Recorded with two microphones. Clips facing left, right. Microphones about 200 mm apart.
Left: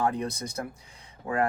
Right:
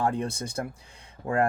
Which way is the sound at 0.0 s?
30° right (ahead or behind).